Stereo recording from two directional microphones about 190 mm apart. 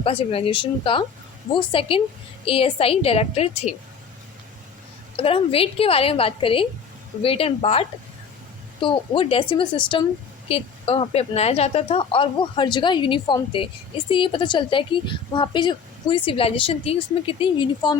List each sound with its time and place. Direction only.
0.0 s a woman's voice: 30° left (ahead or behind)
5.1 s a woman's voice: 30° left (ahead or behind)